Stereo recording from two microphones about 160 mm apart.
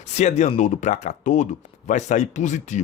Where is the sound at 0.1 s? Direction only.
45° left (ahead or behind).